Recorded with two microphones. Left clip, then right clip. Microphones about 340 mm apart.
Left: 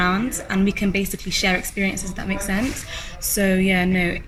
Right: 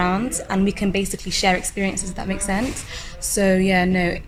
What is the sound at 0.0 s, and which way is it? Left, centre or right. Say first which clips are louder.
Speech: left 1 dB; centre.